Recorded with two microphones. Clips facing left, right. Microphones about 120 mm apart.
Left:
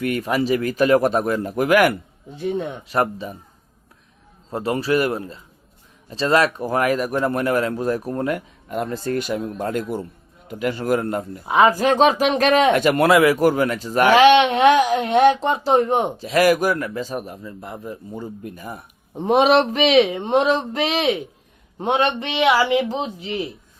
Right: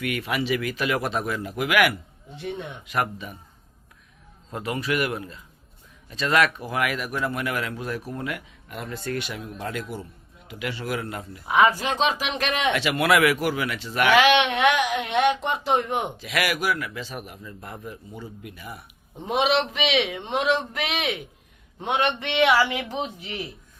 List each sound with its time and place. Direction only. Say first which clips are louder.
0.0 s speech: left 6 dB; 40° left (ahead or behind)
4.5 s speech: left 6 dB; 35° left (ahead or behind)
11.4 s speech: left 4 dB; 35° left (ahead or behind)
13.1 s a man's voice: left 3 dB; 30° left (ahead or behind)
13.4 s a man's voice: left 9 dB; 45° left (ahead or behind)
18.2 s a man's voice: left 7 dB; 40° left (ahead or behind)